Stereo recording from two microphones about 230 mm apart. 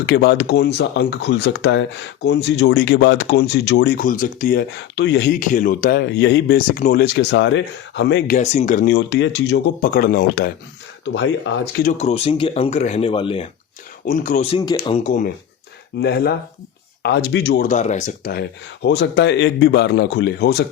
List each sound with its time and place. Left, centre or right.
0.0 s speech: left
4.7 s speech: left
5.4 s speech: left
8.4 s speech: left
9.9 s speech: left
11.0 s speech: left
11.8 s speech: left
14.0 s speech: left
16.0 s speech: left
17.7 s speech: left